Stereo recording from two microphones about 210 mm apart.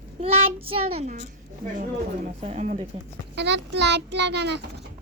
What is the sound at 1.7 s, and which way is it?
Speech, 35° right (ahead or behind).